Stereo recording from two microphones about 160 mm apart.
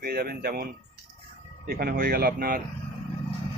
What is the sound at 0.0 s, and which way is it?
Speech, 70° right (ahead or behind).